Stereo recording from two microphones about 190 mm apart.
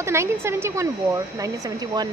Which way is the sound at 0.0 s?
15° right (ahead or behind).